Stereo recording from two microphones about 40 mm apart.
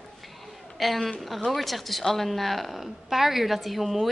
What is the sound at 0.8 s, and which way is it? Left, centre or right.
A woman's voice, centre.